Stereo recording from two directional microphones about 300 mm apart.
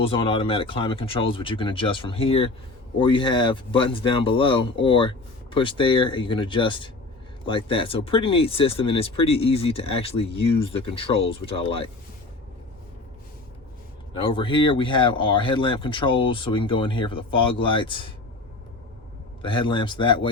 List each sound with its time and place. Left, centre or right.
0.0 s speech: centre
14.1 s speech: centre
19.4 s speech: centre